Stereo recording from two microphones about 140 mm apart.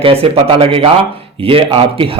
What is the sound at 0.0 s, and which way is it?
A man's voice, 40° right (ahead or behind).